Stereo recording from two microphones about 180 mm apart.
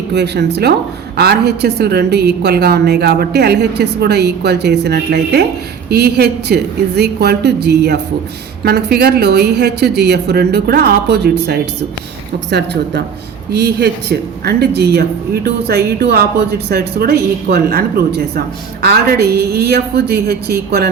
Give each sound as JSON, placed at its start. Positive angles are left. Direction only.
{"t": 0.1, "sound": "a woman's voice", "side_deg": -70}